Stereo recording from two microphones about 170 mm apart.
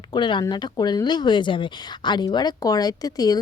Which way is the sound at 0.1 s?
25° left (ahead or behind).